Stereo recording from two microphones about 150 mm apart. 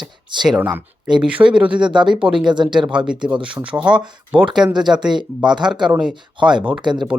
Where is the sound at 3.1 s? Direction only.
5° right (ahead or behind).